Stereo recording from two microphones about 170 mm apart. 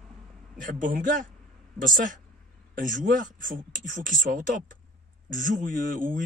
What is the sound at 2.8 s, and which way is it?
Speech, 50° right (ahead or behind).